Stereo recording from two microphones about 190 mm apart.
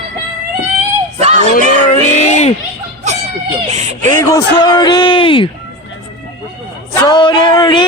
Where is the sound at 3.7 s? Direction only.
35° right (ahead or behind).